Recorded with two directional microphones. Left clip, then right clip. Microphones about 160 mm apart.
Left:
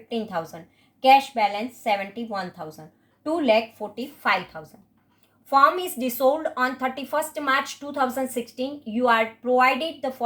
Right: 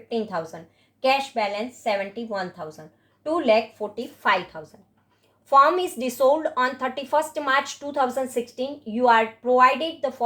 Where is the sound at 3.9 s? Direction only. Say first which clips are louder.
Right 1 dB; 35° right (ahead or behind).